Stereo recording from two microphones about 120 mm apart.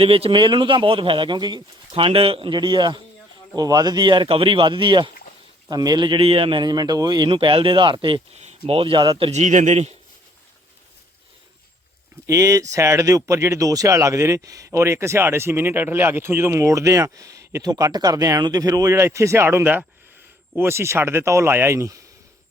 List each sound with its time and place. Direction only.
0.0 s a man's voice: 50° right (ahead or behind)
9.3 s speech: 85° right
12.2 s speech: 25° right (ahead or behind)